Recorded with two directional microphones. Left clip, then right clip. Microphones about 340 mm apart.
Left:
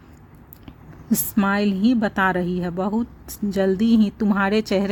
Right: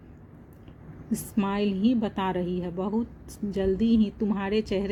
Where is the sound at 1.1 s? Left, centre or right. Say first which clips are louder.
Left 8 dB; left.